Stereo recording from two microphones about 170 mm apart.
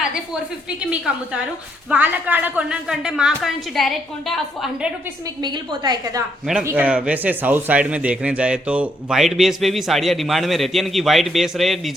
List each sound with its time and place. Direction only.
0.8 s a woman's voice: 5° right (ahead or behind)
5.4 s a woman's voice: 25° right (ahead or behind)
6.7 s a man's voice: 10° right (ahead or behind)